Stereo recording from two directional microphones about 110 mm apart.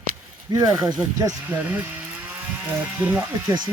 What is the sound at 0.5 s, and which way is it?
Speech, 40° right (ahead or behind).